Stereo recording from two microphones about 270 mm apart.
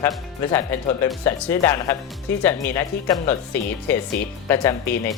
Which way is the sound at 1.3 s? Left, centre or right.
Centre.